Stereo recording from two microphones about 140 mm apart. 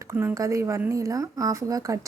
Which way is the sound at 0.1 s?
20° right (ahead or behind).